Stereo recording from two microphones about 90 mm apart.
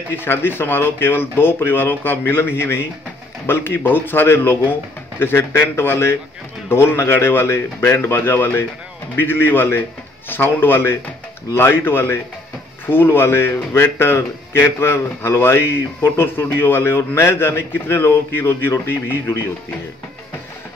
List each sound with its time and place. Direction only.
0.1 s speech: 25° left (ahead or behind)